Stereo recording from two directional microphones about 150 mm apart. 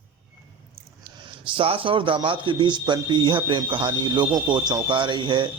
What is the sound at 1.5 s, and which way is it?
A man's voice, 35° right (ahead or behind).